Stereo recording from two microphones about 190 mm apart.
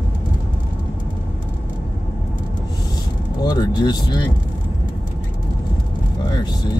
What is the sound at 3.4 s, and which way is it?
Speech, 20° left (ahead or behind).